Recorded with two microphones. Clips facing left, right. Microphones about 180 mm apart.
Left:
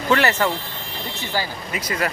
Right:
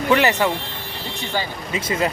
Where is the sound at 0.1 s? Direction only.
15° right (ahead or behind).